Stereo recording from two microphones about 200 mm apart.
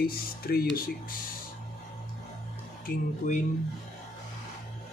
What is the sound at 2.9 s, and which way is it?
Speech, 40° left (ahead or behind).